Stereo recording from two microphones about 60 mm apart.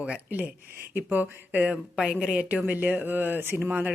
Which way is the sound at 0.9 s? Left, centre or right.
Right.